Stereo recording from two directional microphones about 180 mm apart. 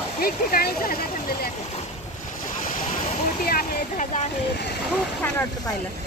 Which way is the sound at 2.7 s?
50° left (ahead or behind).